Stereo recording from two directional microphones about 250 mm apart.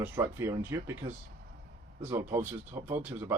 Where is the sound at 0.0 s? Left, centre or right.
Centre.